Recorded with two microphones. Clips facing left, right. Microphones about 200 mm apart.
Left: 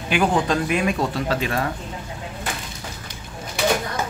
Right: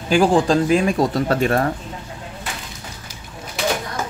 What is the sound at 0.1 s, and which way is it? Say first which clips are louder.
Speech: right 5 dB; 30° right (ahead or behind).